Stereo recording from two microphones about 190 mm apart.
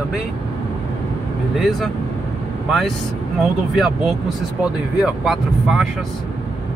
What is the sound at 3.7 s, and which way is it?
Speech, centre (ahead or behind).